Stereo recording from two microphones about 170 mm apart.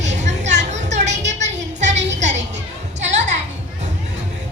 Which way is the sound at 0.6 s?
45° right (ahead or behind).